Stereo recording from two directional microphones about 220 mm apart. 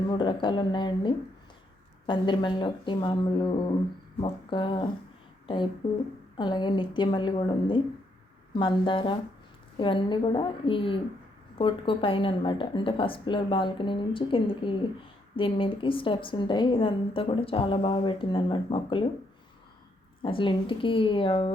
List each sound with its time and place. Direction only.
0.1 s a woman's voice: 20° left (ahead or behind)
20.2 s a woman's voice: 20° left (ahead or behind)